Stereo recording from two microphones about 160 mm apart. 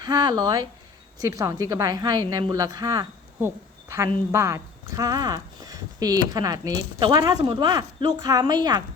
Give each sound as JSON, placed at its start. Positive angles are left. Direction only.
{"t": 0.0, "sound": "a woman's voice", "side_deg": -25}